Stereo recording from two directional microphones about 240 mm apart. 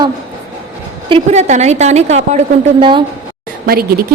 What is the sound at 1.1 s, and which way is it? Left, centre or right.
A woman's voice, right.